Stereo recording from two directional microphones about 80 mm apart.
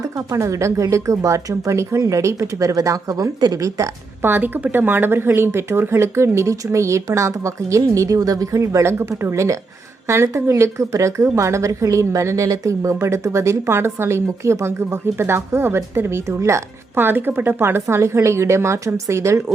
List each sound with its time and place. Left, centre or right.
0.3 s a woman's voice: right
4.2 s a woman's voice: right